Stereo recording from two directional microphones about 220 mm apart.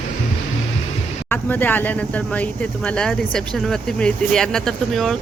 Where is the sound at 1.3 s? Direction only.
10° left (ahead or behind).